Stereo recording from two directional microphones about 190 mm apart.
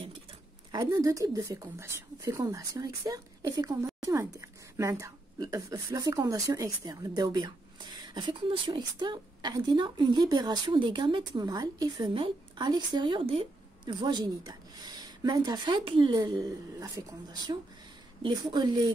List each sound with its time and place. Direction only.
0.7 s a woman's voice: 20° right (ahead or behind)